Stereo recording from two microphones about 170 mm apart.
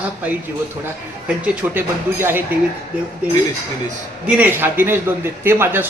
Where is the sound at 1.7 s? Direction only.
10° right (ahead or behind).